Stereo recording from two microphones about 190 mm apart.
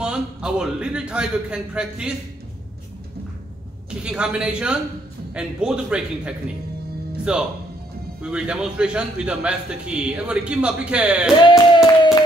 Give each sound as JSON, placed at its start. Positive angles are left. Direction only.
{"t": 0.0, "sound": "a man's voice", "side_deg": -5}
{"t": 4.0, "sound": "a man's voice", "side_deg": -5}
{"t": 11.4, "sound": "speech", "side_deg": 25}